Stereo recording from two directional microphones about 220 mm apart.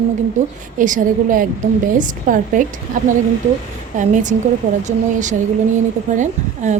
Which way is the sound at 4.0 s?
35° right (ahead or behind).